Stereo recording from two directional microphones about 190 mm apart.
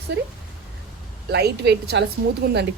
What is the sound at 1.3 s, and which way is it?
Speech, 60° right (ahead or behind).